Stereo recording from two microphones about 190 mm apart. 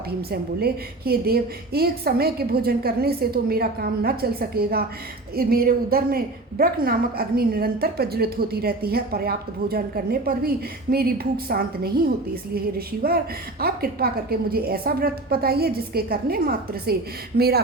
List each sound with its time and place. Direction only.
0.2 s a woman's voice: 55° right (ahead or behind)